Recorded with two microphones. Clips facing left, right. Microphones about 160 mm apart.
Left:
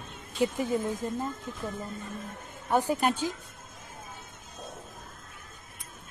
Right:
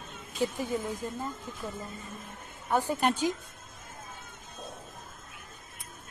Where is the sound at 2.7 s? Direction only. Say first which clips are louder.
Left 2 dB; 10° left (ahead or behind).